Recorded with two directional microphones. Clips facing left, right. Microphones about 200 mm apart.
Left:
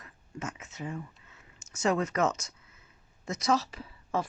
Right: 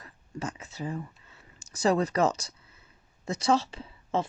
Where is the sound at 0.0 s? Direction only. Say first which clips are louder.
Right 3 dB; 35° right (ahead or behind).